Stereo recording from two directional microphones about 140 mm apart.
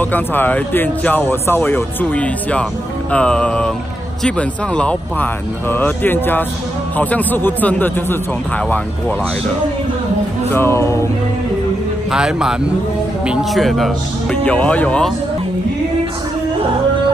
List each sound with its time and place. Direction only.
0.0 s speech: 15° left (ahead or behind)
10.5 s music: 15° left (ahead or behind)
12.1 s a man's voice: 5° right (ahead or behind)